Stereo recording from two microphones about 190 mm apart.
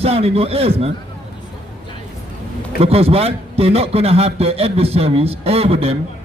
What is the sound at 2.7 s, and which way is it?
A man's voice, 30° right (ahead or behind).